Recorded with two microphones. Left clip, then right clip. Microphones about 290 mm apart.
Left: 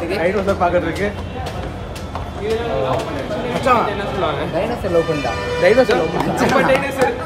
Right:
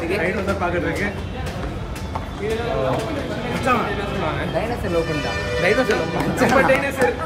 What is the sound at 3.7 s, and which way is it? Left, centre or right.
Speech, centre.